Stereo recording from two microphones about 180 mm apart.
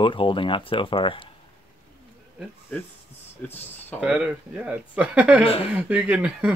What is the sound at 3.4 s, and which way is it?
Speech, 5° left (ahead or behind).